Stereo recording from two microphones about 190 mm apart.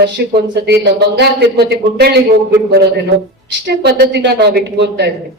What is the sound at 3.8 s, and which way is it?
A man's voice, 60° right (ahead or behind).